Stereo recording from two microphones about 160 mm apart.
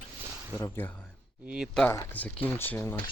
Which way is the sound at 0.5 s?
20° left (ahead or behind).